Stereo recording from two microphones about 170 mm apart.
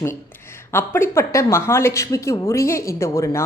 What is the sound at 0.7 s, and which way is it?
A woman's voice, 15° left (ahead or behind).